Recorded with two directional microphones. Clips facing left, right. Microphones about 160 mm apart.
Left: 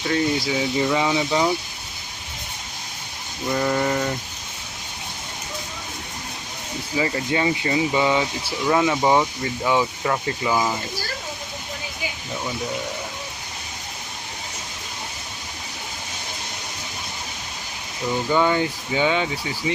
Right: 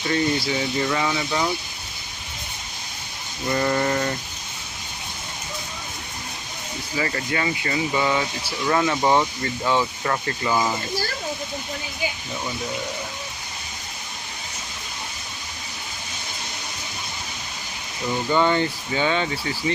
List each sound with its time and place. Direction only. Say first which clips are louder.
0.3 s speech: left 2 dB; 10° left (ahead or behind)
3.5 s a sound: even; 5° left (ahead or behind)
6.9 s speech: left 3 dB; 15° left (ahead or behind)
18.3 s speech: even; 10° left (ahead or behind)